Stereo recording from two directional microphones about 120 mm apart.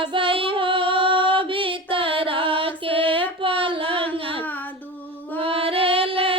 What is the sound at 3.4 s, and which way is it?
Child singing, 50° right (ahead or behind).